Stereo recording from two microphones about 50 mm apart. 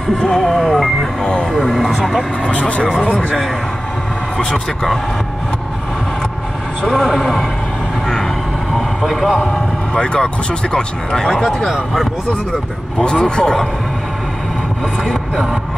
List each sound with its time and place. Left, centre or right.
0.2 s speech: centre
2.4 s speech: left
4.4 s speech: centre
6.8 s speech: centre
8.7 s vehicle: centre
9.4 s speech: centre
13.0 s speech: centre